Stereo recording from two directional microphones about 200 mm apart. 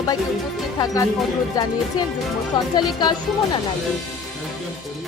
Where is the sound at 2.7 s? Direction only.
20° left (ahead or behind).